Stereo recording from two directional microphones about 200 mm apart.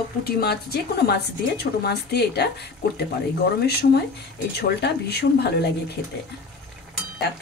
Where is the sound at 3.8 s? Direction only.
50° left (ahead or behind).